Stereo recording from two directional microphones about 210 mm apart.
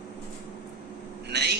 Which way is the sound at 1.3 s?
55° right (ahead or behind).